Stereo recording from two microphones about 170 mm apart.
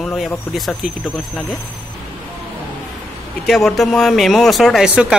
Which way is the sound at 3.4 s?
Centre (ahead or behind).